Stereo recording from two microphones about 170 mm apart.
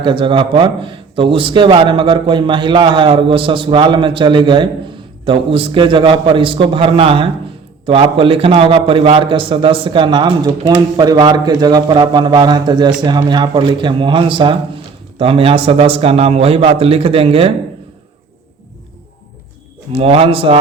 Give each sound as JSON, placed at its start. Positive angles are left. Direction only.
{"t": 0.0, "sound": "a man's voice", "side_deg": -30}
{"t": 19.9, "sound": "a man's voice", "side_deg": -35}